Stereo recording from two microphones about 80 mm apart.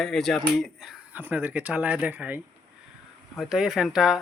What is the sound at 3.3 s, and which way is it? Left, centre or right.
Speech, centre.